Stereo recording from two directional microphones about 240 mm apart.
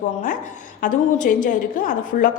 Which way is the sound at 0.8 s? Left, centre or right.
Left.